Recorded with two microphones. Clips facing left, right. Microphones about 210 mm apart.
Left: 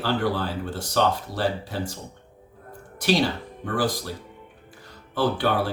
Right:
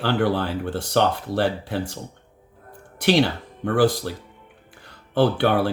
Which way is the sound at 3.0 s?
60° right (ahead or behind).